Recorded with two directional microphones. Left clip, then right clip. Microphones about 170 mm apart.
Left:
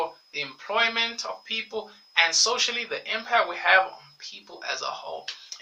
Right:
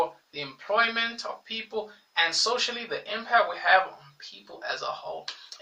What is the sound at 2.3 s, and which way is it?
Speech, 15° left (ahead or behind).